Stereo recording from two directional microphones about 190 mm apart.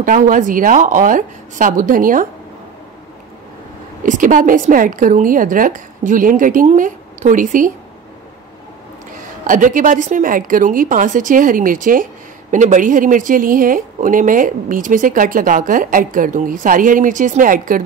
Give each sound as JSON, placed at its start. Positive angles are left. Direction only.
{"t": 0.0, "sound": "a woman's voice", "side_deg": -45}
{"t": 4.0, "sound": "a woman's voice", "side_deg": -45}
{"t": 9.5, "sound": "a woman's voice", "side_deg": -45}